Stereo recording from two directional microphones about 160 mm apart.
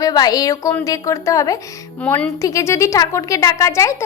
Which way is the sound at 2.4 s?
20° left (ahead or behind).